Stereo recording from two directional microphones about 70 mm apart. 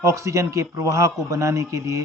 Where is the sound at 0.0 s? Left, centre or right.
Right.